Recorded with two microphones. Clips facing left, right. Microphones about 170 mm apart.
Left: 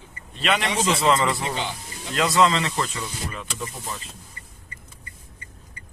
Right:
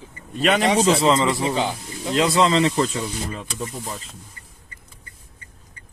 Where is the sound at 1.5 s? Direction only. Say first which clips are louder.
Right 6 dB; 40° right (ahead or behind).